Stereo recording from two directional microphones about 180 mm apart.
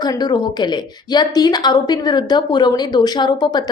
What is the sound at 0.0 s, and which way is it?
A woman's voice, 25° left (ahead or behind).